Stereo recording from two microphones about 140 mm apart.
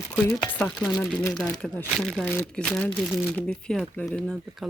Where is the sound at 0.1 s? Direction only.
5° left (ahead or behind).